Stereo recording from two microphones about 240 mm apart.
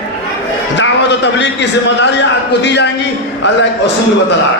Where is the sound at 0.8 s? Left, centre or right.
Left.